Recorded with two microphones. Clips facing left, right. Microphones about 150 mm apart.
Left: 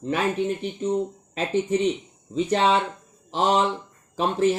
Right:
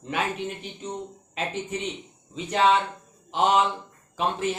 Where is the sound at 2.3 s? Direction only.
35° left (ahead or behind).